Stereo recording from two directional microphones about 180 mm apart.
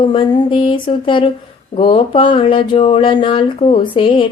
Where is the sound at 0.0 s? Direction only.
30° left (ahead or behind).